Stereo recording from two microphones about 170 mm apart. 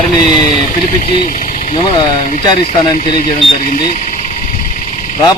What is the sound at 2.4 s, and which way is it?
Speech, 25° left (ahead or behind).